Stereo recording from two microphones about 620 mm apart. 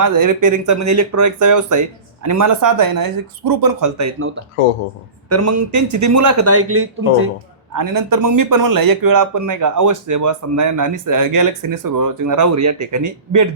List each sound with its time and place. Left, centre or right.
0.0 s speech: right
5.3 s speech: right
7.7 s speech: right